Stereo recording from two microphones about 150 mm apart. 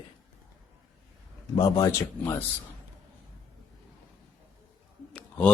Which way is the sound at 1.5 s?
25° left (ahead or behind).